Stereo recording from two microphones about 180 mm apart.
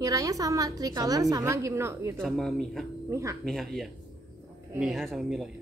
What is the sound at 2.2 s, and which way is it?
Speech, centre (ahead or behind).